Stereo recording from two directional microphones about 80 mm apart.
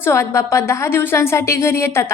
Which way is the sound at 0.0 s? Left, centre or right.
Left.